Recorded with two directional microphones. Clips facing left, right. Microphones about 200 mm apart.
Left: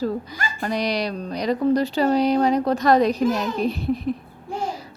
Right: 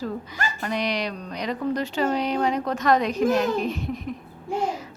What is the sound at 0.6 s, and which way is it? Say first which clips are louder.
A woman's voice: left 4 dB; 35° left (ahead or behind).